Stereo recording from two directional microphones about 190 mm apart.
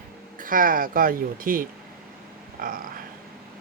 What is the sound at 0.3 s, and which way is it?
Speech, 45° right (ahead or behind).